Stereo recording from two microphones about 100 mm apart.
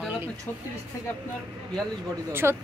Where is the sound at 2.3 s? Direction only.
25° right (ahead or behind).